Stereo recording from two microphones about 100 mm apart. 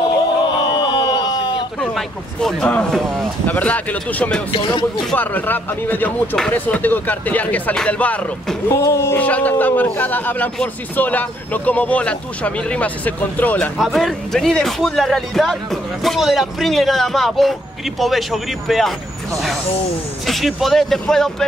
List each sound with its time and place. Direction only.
0.7 s a sound: 50° left (ahead or behind)
2.0 s a man's voice: 5° left (ahead or behind)
4.5 s speech: 60° left (ahead or behind)
5.1 s speech: 15° left (ahead or behind)
8.6 s speech: 30° left (ahead or behind)
9.2 s speech: 15° left (ahead or behind)
13.7 s a man's voice: centre (ahead or behind)
20.2 s a man's voice: centre (ahead or behind)